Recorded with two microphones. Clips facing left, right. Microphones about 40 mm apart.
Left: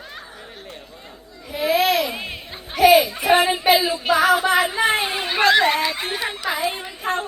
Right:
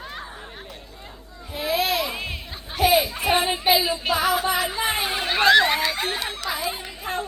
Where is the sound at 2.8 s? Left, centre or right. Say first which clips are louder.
Left 6 dB; left.